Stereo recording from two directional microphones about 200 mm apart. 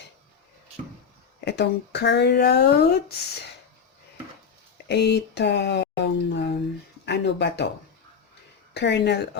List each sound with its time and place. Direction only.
1.5 s speech: 60° left (ahead or behind)
4.9 s speech: 55° left (ahead or behind)
8.7 s speech: 60° left (ahead or behind)